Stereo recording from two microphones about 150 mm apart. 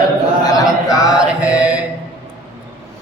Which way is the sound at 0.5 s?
25° left (ahead or behind).